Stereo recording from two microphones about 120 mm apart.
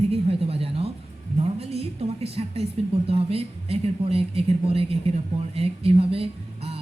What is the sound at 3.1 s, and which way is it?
Speech, 55° right (ahead or behind).